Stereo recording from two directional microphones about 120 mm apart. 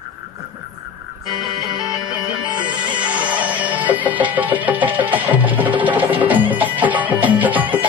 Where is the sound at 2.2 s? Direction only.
40° right (ahead or behind).